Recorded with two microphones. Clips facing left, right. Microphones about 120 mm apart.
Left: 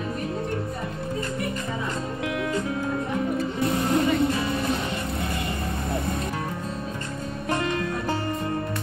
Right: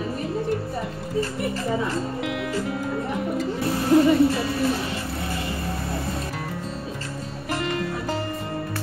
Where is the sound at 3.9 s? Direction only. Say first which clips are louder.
Right 8 dB; 30° right (ahead or behind).